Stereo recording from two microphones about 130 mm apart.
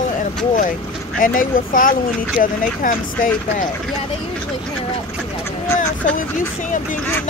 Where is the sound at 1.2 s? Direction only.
90° left.